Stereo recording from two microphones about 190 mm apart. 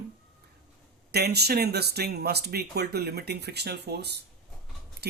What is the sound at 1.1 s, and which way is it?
Speech, 60° right (ahead or behind).